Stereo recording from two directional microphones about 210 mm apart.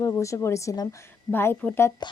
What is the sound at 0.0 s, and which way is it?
A woman's voice, 15° left (ahead or behind).